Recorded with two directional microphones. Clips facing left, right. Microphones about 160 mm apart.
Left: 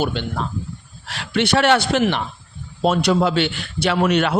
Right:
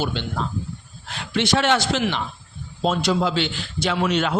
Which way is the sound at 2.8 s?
65° left (ahead or behind).